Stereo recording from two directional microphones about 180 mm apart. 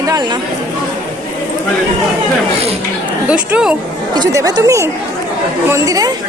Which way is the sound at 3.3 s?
5° right (ahead or behind).